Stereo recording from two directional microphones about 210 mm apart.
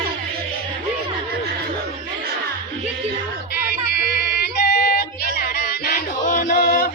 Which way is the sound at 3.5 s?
50° left (ahead or behind).